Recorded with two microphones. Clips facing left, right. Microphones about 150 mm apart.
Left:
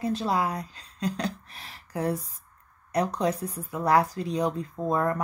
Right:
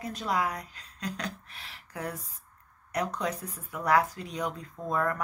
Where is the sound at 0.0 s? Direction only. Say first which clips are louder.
Left 4 dB; 30° left (ahead or behind).